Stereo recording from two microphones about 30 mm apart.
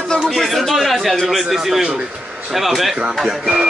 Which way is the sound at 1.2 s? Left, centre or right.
Centre.